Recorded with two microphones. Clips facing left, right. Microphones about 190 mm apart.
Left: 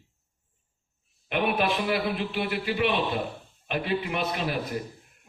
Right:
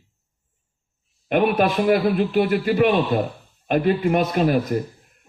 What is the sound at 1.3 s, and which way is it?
A man's voice, 45° right (ahead or behind).